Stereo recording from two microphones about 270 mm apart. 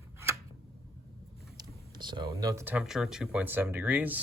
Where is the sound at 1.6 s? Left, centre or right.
Centre.